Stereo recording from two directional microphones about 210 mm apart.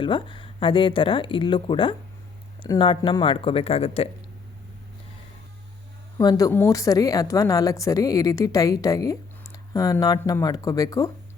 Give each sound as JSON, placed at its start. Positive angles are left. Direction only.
{"t": 0.0, "sound": "speech", "side_deg": 25}
{"t": 6.1, "sound": "speech", "side_deg": 15}